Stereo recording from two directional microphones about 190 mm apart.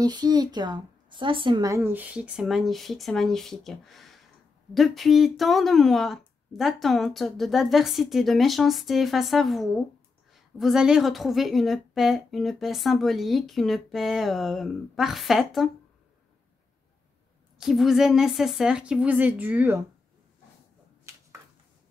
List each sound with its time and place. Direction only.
0.0 s a woman's voice: 20° right (ahead or behind); by 15.7 s centre (ahead or behind)
17.6 s a woman's voice: centre (ahead or behind)
21.0 s finger snapping: 15° right (ahead or behind)